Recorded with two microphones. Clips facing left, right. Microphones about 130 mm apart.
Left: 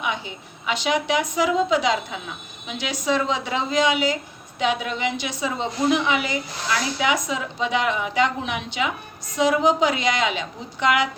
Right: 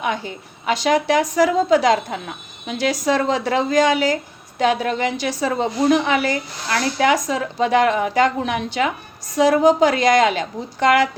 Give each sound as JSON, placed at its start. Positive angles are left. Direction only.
{"t": 0.0, "sound": "a woman's voice", "side_deg": -45}